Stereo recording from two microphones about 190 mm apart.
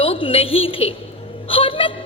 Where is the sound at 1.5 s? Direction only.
30° left (ahead or behind).